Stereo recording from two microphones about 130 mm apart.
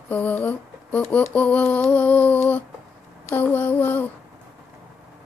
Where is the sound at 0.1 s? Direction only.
10° left (ahead or behind).